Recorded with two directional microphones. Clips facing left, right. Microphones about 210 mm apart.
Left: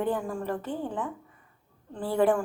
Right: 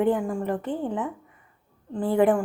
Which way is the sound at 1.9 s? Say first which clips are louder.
Right 4 dB; 20° right (ahead or behind).